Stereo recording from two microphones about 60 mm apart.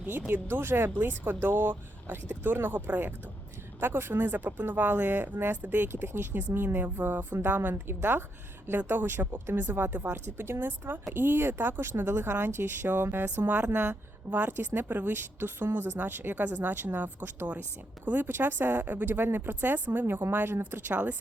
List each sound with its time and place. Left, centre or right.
0.1 s speech: right